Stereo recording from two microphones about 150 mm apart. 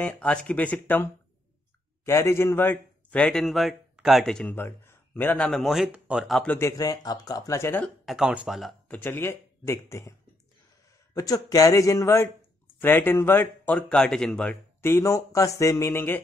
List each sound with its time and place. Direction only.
0.0 s a man's voice: 10° left (ahead or behind)
6.4 s speech: 10° left (ahead or behind)
6.8 s speech: 25° left (ahead or behind)
8.0 s speech: 5° right (ahead or behind)
8.9 s speech: 15° left (ahead or behind)
11.1 s speech: 25° left (ahead or behind); by 14.6 s 5° left (ahead or behind)
14.8 s speech: 15° left (ahead or behind)